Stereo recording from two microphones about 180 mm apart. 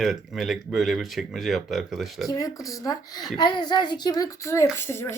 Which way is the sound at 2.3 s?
20° left (ahead or behind).